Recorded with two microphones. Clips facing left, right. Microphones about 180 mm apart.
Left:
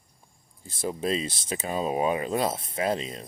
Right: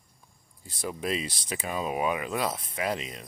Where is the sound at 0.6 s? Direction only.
25° left (ahead or behind).